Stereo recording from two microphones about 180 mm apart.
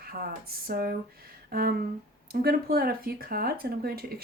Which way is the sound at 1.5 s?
55° right (ahead or behind).